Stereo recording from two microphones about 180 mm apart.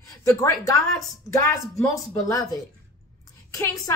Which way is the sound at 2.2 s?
20° left (ahead or behind).